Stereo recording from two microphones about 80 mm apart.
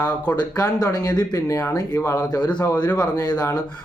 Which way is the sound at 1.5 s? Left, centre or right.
Left.